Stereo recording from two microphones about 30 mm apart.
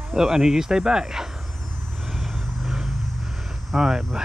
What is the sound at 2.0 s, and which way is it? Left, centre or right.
Vehicle, centre.